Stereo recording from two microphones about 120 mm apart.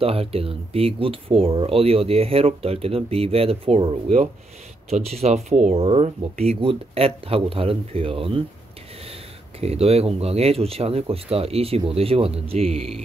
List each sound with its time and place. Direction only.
0.0 s speech: 55° right (ahead or behind); by 5.9 s 75° right (ahead or behind)
5.9 s speech: 60° right (ahead or behind)
9.6 s speech: 60° right (ahead or behind)